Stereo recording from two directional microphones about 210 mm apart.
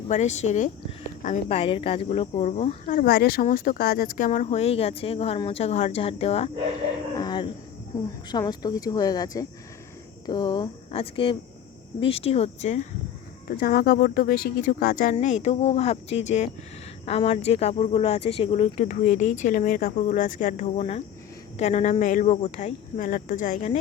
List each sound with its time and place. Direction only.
0.1 s speech: 35° left (ahead or behind)
7.2 s a sound: 20° left (ahead or behind)
8.3 s speech: 20° left (ahead or behind)
13.5 s speech: 45° left (ahead or behind)
15.1 s speech: 35° left (ahead or behind)